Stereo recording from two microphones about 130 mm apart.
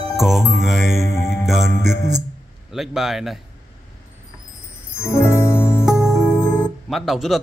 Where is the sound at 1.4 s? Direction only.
Centre (ahead or behind).